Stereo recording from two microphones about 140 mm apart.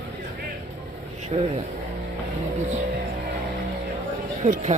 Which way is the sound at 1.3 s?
50° right (ahead or behind).